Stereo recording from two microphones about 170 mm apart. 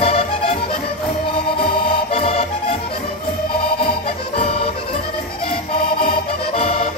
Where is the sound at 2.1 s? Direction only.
35° left (ahead or behind).